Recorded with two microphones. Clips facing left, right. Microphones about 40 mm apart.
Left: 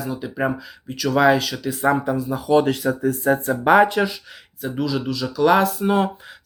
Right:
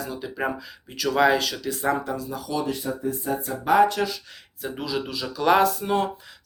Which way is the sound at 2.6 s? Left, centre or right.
Left.